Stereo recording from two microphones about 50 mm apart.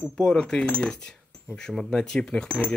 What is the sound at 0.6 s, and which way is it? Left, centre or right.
Speech, left.